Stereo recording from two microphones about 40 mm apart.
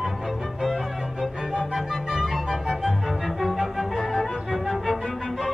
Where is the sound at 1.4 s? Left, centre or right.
Centre.